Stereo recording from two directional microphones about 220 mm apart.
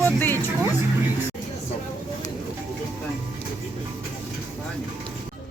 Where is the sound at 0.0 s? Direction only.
10° left (ahead or behind).